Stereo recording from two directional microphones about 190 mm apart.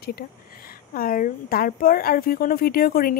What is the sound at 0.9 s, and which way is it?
A woman's voice, 50° left (ahead or behind).